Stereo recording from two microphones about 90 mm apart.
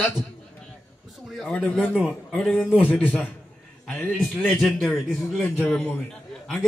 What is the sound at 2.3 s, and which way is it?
Speech, 5° left (ahead or behind).